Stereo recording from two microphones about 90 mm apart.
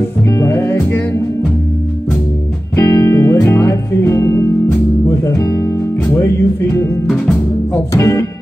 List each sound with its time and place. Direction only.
0.3 s music: 35° left (ahead or behind)
0.6 s music: 25° left (ahead or behind)
2.9 s music: 35° left (ahead or behind)
3.5 s music: 25° left (ahead or behind)
7.9 s speech: 30° left (ahead or behind)